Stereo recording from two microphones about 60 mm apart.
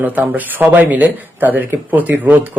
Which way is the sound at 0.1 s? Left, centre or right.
Right.